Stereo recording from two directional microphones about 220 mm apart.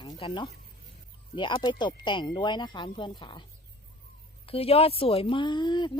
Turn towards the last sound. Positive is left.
turn(degrees=20)  # may be behind; listen again after turning